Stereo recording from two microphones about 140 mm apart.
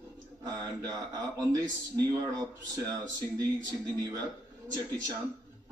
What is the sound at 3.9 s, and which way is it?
Speech, 25° right (ahead or behind).